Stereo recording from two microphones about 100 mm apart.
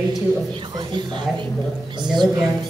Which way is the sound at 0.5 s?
50° right (ahead or behind).